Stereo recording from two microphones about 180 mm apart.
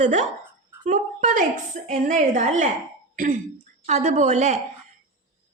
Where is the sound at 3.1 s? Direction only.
50° right (ahead or behind).